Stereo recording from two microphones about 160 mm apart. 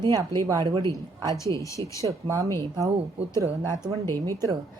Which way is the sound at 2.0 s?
20° right (ahead or behind).